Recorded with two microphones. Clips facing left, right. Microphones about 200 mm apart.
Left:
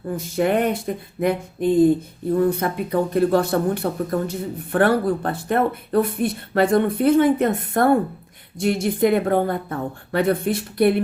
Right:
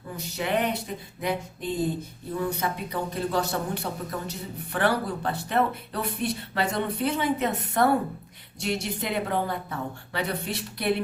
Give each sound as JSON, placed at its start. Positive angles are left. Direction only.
{"t": 0.2, "sound": "speech", "side_deg": 50}